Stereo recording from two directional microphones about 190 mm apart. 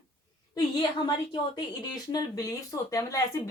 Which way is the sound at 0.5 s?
25° left (ahead or behind).